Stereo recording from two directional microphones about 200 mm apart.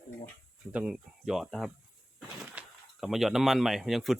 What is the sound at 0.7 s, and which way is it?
Speech, 5° right (ahead or behind).